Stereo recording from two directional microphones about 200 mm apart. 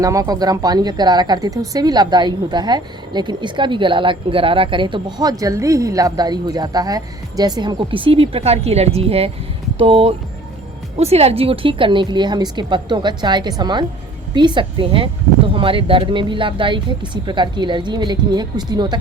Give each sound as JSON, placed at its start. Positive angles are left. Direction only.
{"t": 0.0, "sound": "a woman's voice", "side_deg": -15}